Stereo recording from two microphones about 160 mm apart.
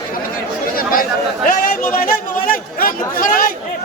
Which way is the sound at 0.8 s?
60° left (ahead or behind).